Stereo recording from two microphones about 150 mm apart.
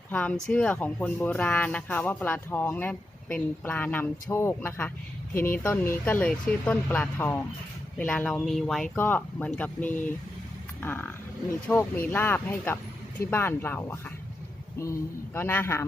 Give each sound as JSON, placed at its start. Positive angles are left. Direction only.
{"t": 0.1, "sound": "speech", "side_deg": 10}